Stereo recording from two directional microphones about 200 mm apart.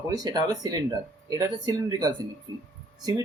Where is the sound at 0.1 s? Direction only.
20° right (ahead or behind).